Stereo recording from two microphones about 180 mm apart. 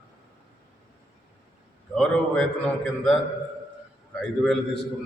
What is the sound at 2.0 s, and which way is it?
Speech, 5° left (ahead or behind).